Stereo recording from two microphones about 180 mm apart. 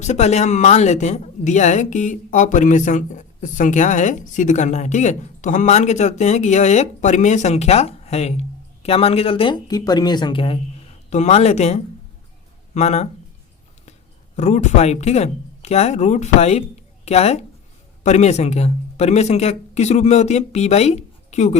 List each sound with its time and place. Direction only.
0.0 s a woman's voice: 40° left (ahead or behind)
14.3 s a woman's voice: 40° left (ahead or behind)